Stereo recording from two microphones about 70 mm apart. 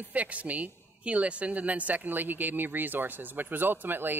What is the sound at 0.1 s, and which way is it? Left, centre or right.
Speech, right.